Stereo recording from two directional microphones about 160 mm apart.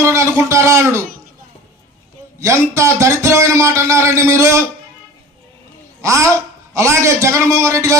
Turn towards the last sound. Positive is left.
turn(degrees=-20)  # may be behind; listen again after turning